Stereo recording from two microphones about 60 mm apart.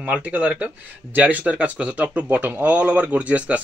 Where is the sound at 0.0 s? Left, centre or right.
Right.